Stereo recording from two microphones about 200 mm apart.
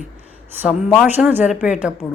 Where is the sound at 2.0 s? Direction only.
15° left (ahead or behind).